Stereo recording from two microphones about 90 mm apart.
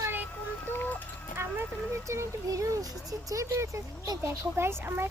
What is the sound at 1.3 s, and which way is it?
Speech, 30° right (ahead or behind).